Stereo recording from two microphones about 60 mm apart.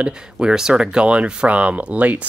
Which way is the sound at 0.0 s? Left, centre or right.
Centre.